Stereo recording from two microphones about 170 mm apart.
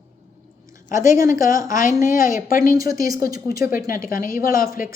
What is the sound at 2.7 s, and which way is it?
A woman's voice, 20° right (ahead or behind).